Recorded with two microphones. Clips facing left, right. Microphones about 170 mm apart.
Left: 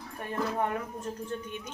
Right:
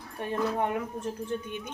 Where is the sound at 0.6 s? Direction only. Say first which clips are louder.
Right 2 dB; 15° right (ahead or behind).